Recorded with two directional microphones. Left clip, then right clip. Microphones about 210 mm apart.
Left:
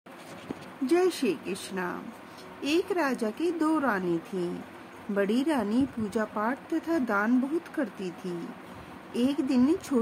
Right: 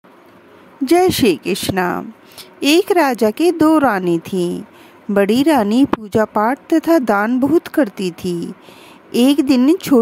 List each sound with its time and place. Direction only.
0.8 s a woman's voice: 50° right (ahead or behind)